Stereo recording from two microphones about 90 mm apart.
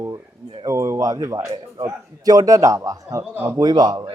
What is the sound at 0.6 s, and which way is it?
A man's voice, 35° right (ahead or behind).